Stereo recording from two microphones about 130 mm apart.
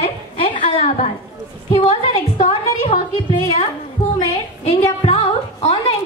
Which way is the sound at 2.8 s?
35° left (ahead or behind).